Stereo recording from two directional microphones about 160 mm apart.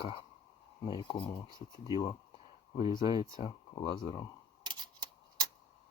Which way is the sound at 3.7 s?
30° left (ahead or behind).